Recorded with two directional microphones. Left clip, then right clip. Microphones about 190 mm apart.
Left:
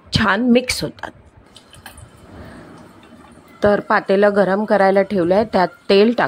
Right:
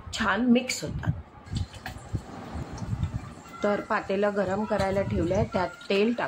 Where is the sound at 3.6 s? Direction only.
50° left (ahead or behind).